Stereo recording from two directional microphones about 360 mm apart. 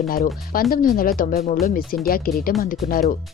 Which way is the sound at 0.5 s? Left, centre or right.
Left.